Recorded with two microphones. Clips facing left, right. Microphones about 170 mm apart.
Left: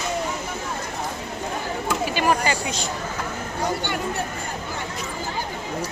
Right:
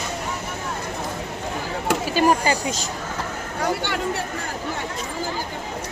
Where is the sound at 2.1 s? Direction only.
40° right (ahead or behind).